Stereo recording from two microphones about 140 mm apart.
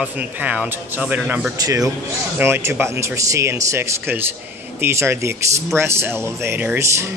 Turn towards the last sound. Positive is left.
turn(degrees=-15)  # may be behind; listen again after turning